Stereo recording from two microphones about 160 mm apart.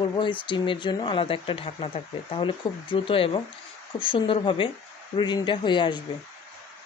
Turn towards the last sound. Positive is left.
turn(degrees=30)  # may be behind; listen again after turning